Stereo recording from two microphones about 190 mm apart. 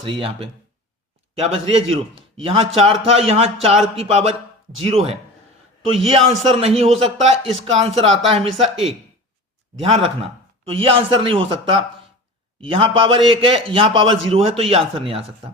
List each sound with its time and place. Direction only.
0.0 s a man's voice: 30° right (ahead or behind)